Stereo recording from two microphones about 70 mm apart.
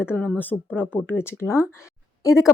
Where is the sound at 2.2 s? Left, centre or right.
Left.